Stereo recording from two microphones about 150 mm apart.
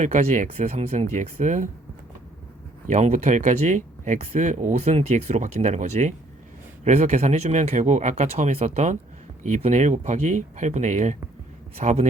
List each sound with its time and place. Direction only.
0.0 s speech: 50° right (ahead or behind)
2.8 s speech: 50° right (ahead or behind)